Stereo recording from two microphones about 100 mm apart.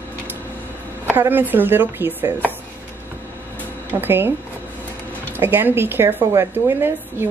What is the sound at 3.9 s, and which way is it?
A woman's voice, 20° right (ahead or behind).